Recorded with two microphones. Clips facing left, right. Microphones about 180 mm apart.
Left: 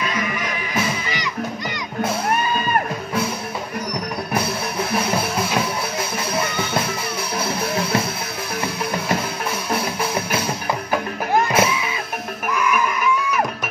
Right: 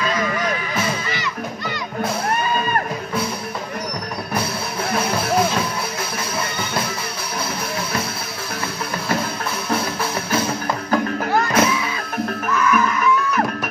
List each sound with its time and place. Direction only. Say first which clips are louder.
10.9 s music: right 3 dB; 15° left (ahead or behind)